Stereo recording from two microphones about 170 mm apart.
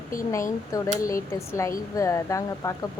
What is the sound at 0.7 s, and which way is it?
Speech, 20° left (ahead or behind).